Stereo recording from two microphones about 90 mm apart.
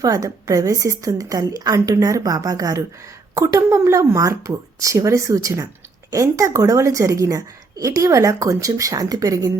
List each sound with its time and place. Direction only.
0.0 s a woman's voice: 40° right (ahead or behind)